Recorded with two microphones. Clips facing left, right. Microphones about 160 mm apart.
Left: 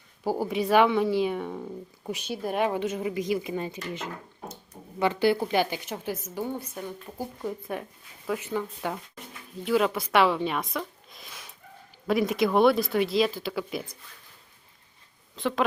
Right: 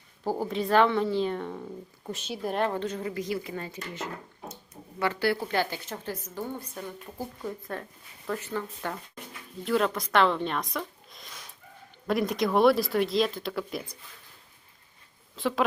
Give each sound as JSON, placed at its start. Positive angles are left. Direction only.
{"t": 0.3, "sound": "a woman's voice", "side_deg": 10}
{"t": 15.4, "sound": "speech", "side_deg": 0}